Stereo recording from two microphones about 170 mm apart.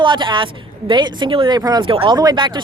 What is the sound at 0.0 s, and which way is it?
Speech, 30° right (ahead or behind).